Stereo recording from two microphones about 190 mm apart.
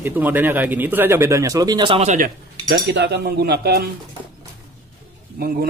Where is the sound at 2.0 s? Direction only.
50° right (ahead or behind).